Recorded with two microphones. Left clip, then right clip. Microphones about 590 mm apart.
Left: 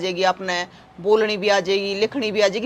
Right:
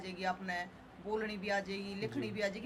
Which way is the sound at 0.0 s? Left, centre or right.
Left.